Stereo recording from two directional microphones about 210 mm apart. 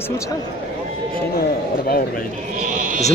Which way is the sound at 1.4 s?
45° left (ahead or behind).